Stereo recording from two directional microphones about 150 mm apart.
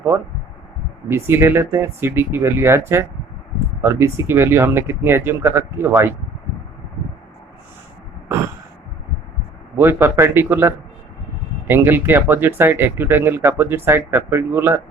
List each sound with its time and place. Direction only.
1.0 s speech: 15° right (ahead or behind)
9.7 s speech: 15° right (ahead or behind)